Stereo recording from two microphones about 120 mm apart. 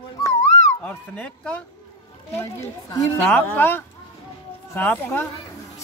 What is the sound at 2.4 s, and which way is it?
Speech, 20° left (ahead or behind).